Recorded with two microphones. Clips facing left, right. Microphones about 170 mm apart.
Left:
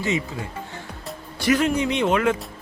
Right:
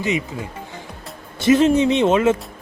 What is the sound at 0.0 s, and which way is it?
Speech, 20° right (ahead or behind).